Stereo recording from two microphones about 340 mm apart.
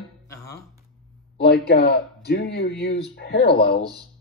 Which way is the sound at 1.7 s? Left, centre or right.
Left.